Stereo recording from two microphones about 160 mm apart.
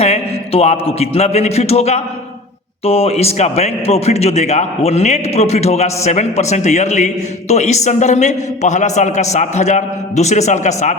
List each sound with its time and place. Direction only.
0.0 s a man's voice: 40° left (ahead or behind)